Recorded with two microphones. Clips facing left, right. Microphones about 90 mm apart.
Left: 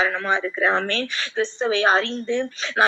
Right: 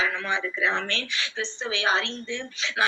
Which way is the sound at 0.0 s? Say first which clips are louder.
Left 5 dB; 45° left (ahead or behind).